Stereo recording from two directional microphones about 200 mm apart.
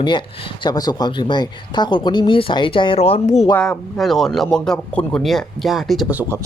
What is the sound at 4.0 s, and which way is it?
Speech, centre (ahead or behind).